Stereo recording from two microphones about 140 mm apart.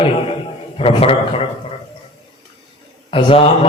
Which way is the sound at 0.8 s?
40° left (ahead or behind).